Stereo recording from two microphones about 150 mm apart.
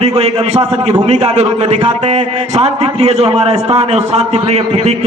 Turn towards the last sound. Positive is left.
turn(degrees=-45)  # may be behind; listen again after turning